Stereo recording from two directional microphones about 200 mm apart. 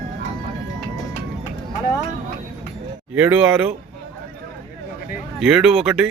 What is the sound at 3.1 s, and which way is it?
Speech, 10° right (ahead or behind).